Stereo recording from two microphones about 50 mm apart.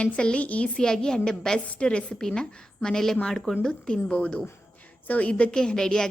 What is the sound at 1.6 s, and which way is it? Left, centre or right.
A woman's voice, left.